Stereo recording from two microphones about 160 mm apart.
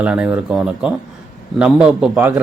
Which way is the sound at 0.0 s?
5° right (ahead or behind).